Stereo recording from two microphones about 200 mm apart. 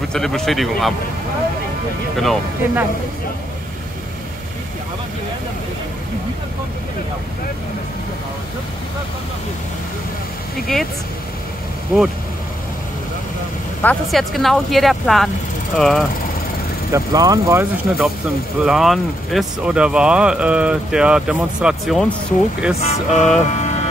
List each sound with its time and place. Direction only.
0.1 s speech: centre (ahead or behind)
2.1 s speech: centre (ahead or behind)
10.7 s speech: centre (ahead or behind)
13.8 s speech: centre (ahead or behind)
16.9 s speech: 15° right (ahead or behind)
18.6 s speech: centre (ahead or behind)
22.8 s speech: 35° left (ahead or behind)